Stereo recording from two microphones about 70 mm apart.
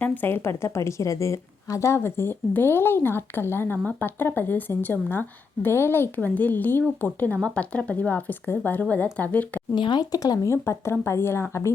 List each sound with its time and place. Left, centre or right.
0.0 s a woman's voice: left
6.1 s speech: left
9.7 s speech: left
10.5 s a woman's voice: left